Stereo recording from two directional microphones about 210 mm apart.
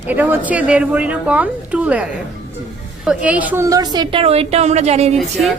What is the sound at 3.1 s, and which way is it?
A woman's voice, 5° right (ahead or behind).